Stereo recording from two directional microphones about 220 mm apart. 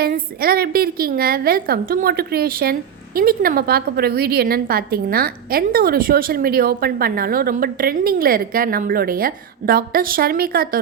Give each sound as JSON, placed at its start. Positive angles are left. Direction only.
{"t": 0.0, "sound": "a woman's voice", "side_deg": -45}